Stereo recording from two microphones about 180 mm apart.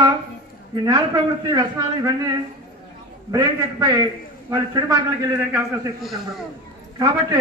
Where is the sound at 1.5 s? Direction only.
20° right (ahead or behind).